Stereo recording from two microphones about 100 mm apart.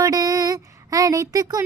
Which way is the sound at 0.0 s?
35° right (ahead or behind).